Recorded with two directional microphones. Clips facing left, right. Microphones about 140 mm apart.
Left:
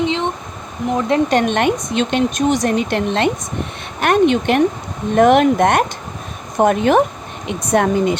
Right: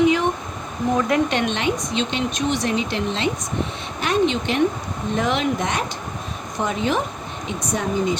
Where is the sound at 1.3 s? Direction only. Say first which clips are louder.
Left 6 dB; 50° left (ahead or behind); by 8.2 s 65° left (ahead or behind).